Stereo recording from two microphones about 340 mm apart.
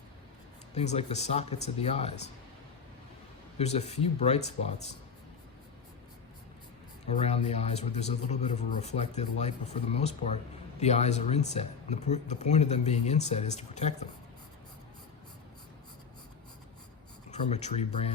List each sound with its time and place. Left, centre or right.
0.7 s a man's voice: centre
3.6 s a man's voice: centre
7.2 s a man's voice: centre
17.5 s a man's voice: centre